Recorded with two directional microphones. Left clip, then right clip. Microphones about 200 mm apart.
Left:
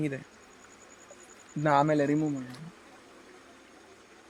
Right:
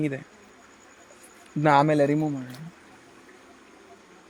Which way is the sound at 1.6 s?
50° right (ahead or behind).